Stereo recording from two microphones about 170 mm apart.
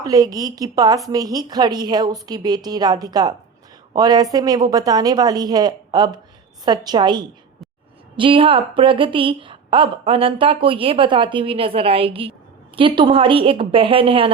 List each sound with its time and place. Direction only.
0.0 s a woman's voice: 20° right (ahead or behind)